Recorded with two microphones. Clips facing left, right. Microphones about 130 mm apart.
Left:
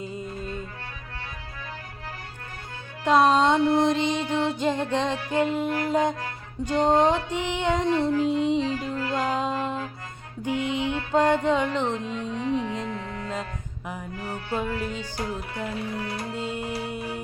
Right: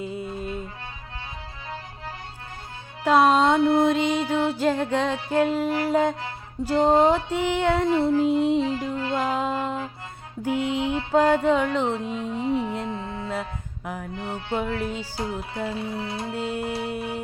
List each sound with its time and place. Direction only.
0.0 s music: 10° right (ahead or behind)
3.0 s music: 5° right (ahead or behind)
8.7 s music: 25° right (ahead or behind)
9.1 s music: 5° right (ahead or behind)
12.5 s speech: 5° right (ahead or behind)
12.9 s music: 25° right (ahead or behind)
13.2 s music: 5° right (ahead or behind)
14.2 s speech: 25° right (ahead or behind)
16.3 s music: 5° right (ahead or behind)